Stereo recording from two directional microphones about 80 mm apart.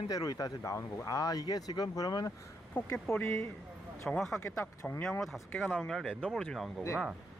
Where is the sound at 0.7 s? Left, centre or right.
Left.